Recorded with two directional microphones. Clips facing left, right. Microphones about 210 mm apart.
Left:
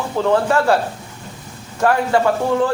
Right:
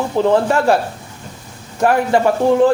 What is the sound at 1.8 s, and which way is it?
Speech, 20° right (ahead or behind).